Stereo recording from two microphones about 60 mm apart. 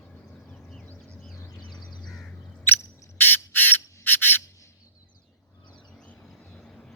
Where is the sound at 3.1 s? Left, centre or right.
Left.